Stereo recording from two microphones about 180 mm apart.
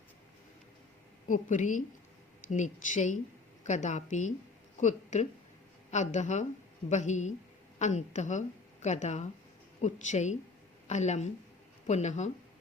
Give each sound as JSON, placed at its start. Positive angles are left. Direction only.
{"t": 1.3, "sound": "a woman's voice", "side_deg": 45}